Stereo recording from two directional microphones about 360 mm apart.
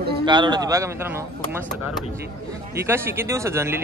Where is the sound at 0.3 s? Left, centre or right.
Centre.